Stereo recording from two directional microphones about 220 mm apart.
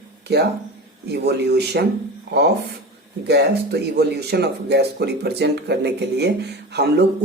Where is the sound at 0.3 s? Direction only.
50° right (ahead or behind).